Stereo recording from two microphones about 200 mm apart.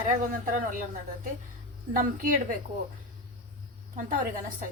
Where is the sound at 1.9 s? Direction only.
45° right (ahead or behind).